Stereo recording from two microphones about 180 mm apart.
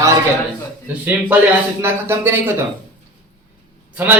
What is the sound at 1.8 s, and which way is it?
Speech, 15° right (ahead or behind).